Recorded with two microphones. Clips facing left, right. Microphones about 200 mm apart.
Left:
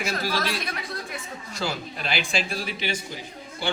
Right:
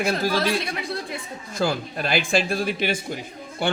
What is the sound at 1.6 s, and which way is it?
Speech, 50° right (ahead or behind).